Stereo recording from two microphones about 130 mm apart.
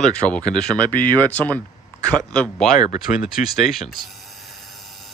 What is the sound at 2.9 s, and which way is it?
Speech, 85° left.